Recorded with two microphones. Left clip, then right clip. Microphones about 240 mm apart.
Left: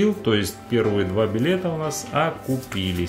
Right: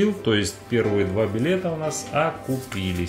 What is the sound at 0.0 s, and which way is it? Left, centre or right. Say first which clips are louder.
Speech: left 1 dB; centre.